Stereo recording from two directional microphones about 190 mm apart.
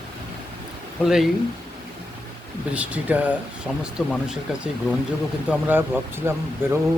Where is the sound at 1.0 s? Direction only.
Centre (ahead or behind).